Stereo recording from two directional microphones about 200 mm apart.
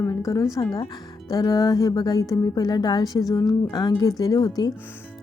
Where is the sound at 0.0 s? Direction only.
15° left (ahead or behind).